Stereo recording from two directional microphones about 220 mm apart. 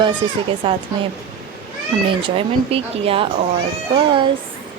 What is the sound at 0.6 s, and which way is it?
Speech, 25° right (ahead or behind).